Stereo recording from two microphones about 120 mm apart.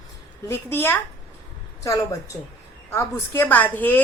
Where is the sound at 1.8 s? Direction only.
30° left (ahead or behind).